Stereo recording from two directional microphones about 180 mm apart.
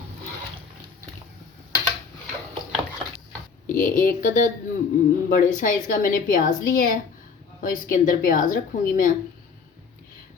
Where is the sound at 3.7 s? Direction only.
45° left (ahead or behind).